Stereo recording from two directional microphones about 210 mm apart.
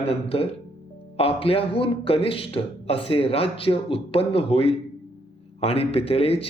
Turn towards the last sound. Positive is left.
turn(degrees=30)  # may be behind; listen again after turning